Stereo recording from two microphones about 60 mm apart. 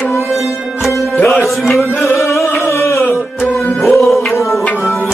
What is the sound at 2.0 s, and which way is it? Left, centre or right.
Music, left.